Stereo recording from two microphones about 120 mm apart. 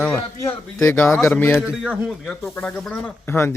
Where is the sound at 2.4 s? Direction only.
15° left (ahead or behind).